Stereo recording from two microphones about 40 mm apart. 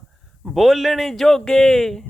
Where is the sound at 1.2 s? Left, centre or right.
Centre.